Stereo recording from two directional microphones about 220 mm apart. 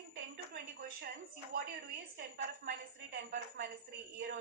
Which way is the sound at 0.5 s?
40° right (ahead or behind).